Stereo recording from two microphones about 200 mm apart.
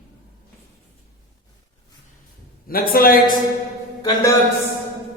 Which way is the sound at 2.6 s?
45° left (ahead or behind).